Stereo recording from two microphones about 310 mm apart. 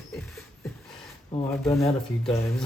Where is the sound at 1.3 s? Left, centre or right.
Centre.